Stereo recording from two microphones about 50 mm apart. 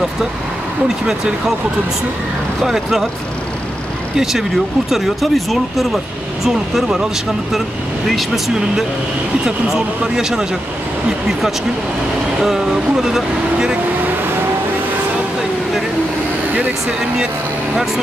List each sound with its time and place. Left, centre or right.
2.6 s speech: centre
4.2 s speech: centre
9.7 s speech: centre
12.4 s speech: centre